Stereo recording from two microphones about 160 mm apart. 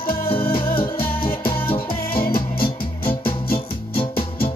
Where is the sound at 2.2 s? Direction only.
65° left (ahead or behind).